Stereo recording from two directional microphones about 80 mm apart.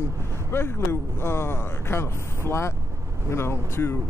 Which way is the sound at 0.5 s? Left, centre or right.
Left.